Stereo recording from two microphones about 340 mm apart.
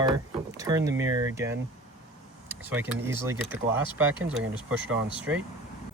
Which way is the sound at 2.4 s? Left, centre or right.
Centre.